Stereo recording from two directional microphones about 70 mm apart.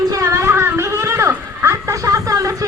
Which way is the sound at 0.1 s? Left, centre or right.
Right.